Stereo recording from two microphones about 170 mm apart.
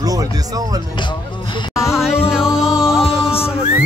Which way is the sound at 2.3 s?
5° right (ahead or behind).